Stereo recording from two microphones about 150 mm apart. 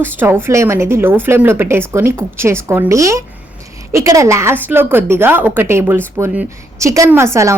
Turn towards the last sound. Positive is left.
turn(degrees=-20)  # may be behind; listen again after turning